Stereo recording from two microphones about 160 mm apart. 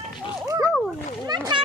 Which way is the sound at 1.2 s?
25° right (ahead or behind).